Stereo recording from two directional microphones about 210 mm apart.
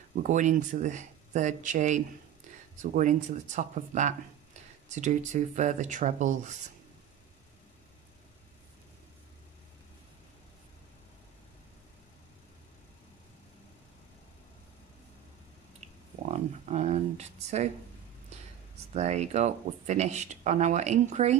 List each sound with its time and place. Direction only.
0.1 s speech: 35° right (ahead or behind)
16.3 s a sound: 30° right (ahead or behind)
18.9 s speech: 30° right (ahead or behind)